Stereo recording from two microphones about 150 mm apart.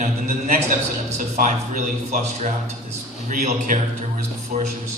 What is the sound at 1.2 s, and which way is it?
Speech, 60° right (ahead or behind).